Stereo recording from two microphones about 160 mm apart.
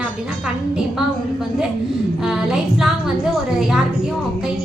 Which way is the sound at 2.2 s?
5° right (ahead or behind).